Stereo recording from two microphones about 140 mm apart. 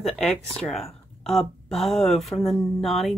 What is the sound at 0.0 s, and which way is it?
Speech, 5° left (ahead or behind).